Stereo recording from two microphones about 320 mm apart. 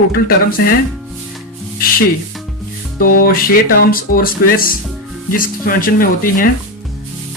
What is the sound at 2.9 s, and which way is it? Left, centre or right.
Speech, left.